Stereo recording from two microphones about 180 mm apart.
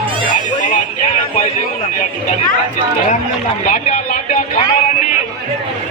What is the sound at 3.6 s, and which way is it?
Speech, 45° left (ahead or behind).